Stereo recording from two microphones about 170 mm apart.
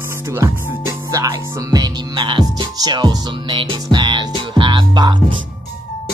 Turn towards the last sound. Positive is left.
turn(degrees=-30)  # may be behind; listen again after turning